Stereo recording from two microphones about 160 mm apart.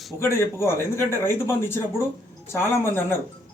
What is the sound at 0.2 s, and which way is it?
A man's voice, 15° left (ahead or behind).